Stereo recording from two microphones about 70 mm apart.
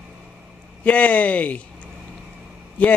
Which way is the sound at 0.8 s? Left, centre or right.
Left.